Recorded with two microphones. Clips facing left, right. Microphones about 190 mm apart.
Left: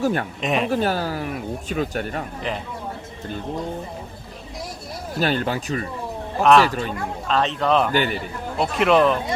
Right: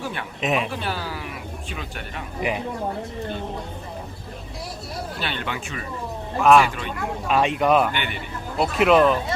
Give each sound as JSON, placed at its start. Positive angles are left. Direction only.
{"t": 0.0, "sound": "speech", "side_deg": 45}
{"t": 0.4, "sound": "speech", "side_deg": 0}
{"t": 0.7, "sound": "speech", "side_deg": 45}
{"t": 5.2, "sound": "speech", "side_deg": 40}
{"t": 6.4, "sound": "speech", "side_deg": -5}
{"t": 7.9, "sound": "speech", "side_deg": 40}
{"t": 8.5, "sound": "speech", "side_deg": 0}